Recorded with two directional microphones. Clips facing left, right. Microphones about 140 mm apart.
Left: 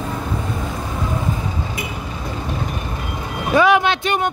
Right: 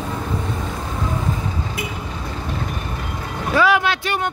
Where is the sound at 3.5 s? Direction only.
20° left (ahead or behind).